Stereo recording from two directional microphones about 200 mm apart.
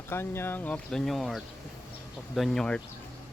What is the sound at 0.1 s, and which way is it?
Speech, 10° left (ahead or behind).